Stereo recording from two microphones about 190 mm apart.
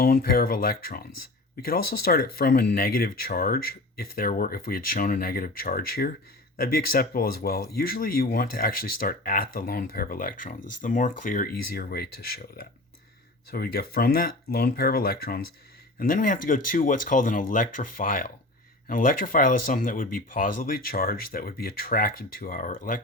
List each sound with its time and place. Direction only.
0.0 s speech: 55° left (ahead or behind)